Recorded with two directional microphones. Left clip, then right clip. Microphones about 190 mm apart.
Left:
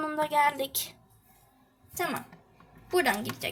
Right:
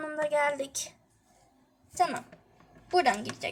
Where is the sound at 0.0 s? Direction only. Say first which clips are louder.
Left 1 dB; 15° left (ahead or behind).